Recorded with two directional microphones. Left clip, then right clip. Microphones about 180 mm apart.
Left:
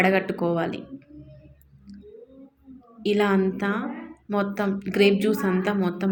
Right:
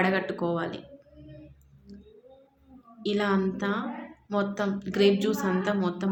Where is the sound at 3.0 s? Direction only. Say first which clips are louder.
Left 5 dB; 20° left (ahead or behind).